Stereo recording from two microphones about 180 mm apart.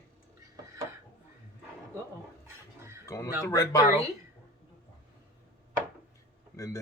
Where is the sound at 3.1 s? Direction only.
15° left (ahead or behind).